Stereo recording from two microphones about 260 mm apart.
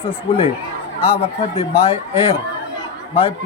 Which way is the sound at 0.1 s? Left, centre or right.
Left.